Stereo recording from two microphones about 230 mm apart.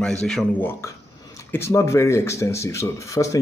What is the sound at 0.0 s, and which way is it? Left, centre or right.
Speech, centre.